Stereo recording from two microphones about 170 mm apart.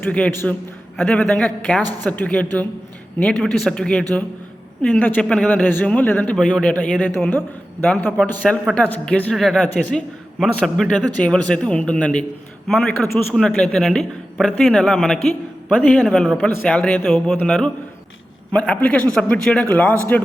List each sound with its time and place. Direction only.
0.0 s speech: 10° left (ahead or behind)
1.8 s a woman's voice: 25° right (ahead or behind)
2.0 s speech: 5° left (ahead or behind)